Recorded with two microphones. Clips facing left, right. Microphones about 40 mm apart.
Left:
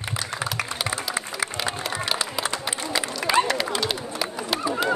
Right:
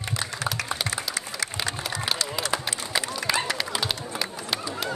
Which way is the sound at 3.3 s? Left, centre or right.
Centre.